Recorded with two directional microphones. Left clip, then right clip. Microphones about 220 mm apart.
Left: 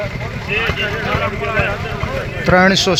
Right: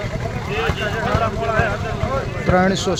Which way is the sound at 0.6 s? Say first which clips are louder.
Left 2 dB; 45° right (ahead or behind).